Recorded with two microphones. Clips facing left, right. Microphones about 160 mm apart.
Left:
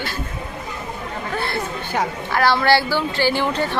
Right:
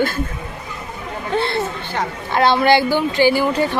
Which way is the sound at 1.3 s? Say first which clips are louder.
Right 6 dB; 25° right (ahead or behind).